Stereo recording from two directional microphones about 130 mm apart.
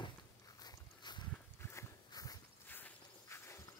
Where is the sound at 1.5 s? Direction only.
20° left (ahead or behind).